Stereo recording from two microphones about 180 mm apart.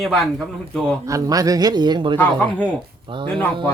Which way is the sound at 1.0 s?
20° right (ahead or behind).